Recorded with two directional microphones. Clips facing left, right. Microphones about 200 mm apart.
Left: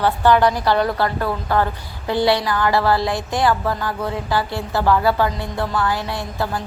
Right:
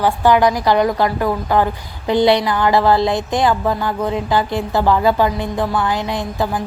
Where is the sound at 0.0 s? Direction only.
10° right (ahead or behind).